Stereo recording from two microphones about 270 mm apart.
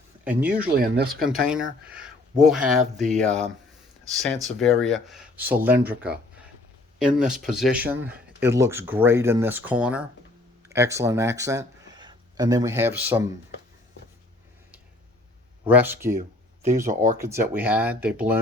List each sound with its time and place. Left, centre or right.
0.3 s speech: centre
0.8 s speech: right
1.2 s speech: centre
7.2 s speech: centre
15.7 s speech: centre
16.9 s speech: right
17.2 s speech: centre